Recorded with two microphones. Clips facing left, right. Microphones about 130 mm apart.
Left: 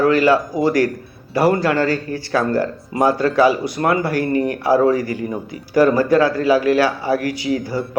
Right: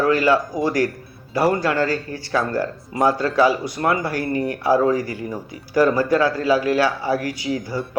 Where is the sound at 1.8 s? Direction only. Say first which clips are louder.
Left 3 dB; 25° right (ahead or behind).